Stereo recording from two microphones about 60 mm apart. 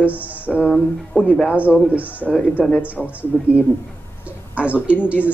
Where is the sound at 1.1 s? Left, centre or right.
Left.